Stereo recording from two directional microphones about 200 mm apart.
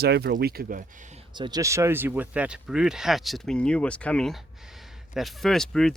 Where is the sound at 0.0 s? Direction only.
55° right (ahead or behind).